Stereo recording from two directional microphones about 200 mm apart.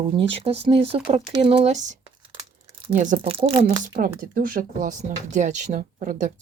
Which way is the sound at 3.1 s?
25° right (ahead or behind).